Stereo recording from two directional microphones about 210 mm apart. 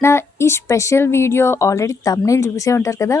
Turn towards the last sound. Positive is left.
turn(degrees=15)  # may be behind; listen again after turning